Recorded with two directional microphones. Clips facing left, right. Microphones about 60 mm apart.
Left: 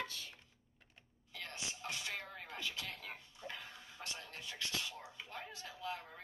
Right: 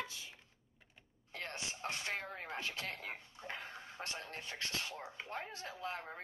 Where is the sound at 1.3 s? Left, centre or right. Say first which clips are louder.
Right 3 dB; right.